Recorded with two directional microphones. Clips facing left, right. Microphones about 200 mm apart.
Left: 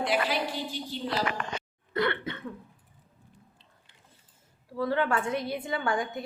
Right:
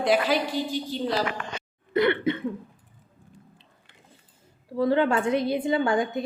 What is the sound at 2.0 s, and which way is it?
Speech, 20° right (ahead or behind).